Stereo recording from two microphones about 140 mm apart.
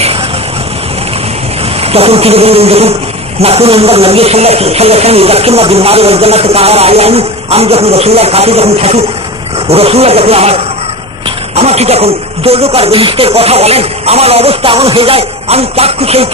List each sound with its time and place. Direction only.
1.8 s a man's voice: 45° right (ahead or behind)